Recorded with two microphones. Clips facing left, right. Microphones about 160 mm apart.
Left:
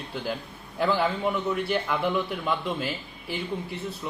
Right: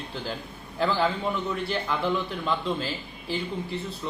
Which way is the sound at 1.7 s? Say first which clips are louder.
Even; 10° left (ahead or behind).